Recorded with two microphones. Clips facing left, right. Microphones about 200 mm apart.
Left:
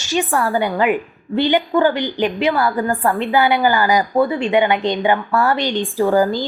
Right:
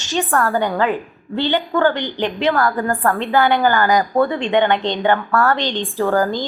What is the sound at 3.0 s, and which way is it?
A woman's voice, 15° left (ahead or behind).